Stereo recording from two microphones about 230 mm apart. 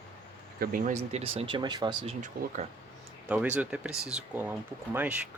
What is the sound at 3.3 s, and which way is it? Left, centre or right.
Speech, centre.